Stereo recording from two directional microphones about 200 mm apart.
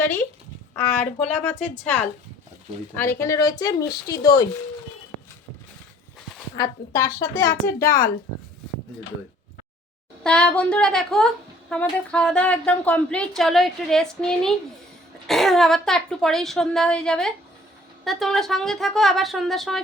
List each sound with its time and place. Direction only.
0.0 s speech: 10° left (ahead or behind)
6.6 s speech: 15° left (ahead or behind)
10.2 s a woman's voice: 5° left (ahead or behind)